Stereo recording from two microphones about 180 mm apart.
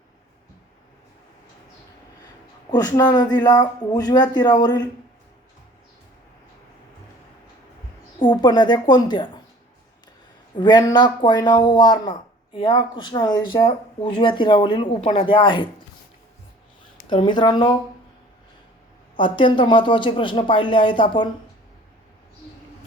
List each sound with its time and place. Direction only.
2.6 s speech: 20° left (ahead or behind)
8.2 s speech: 25° left (ahead or behind)
10.6 s speech: 25° left (ahead or behind)
17.1 s speech: 25° left (ahead or behind)
19.1 s speech: 25° left (ahead or behind)